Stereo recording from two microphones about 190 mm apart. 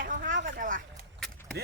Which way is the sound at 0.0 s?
45° right (ahead or behind).